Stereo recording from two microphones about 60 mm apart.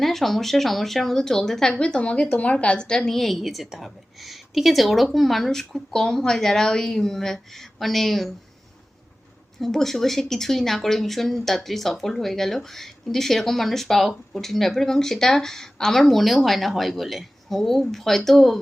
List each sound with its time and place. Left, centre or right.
0.0 s speech: centre
1.8 s a woman's voice: centre
9.6 s speech: centre